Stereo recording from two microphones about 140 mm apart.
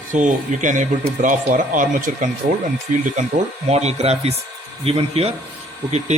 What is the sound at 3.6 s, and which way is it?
Speech, 50° right (ahead or behind).